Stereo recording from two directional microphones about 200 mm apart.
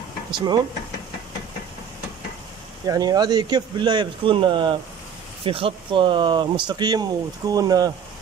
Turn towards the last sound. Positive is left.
turn(degrees=-20)  # may be behind; listen again after turning